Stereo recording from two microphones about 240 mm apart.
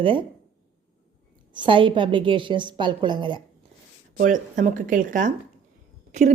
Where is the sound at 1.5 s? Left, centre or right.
Centre.